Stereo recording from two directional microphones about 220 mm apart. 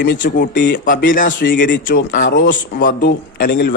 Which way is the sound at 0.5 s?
55° left (ahead or behind).